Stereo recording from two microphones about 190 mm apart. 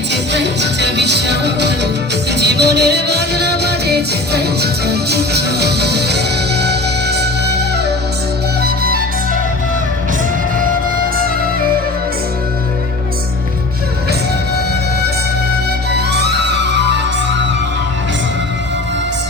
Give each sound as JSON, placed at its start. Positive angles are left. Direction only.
{"t": 0.1, "sound": "music", "side_deg": -65}
{"t": 15.9, "sound": "music", "side_deg": -60}